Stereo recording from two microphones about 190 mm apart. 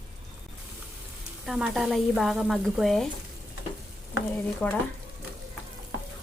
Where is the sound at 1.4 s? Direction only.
Centre (ahead or behind).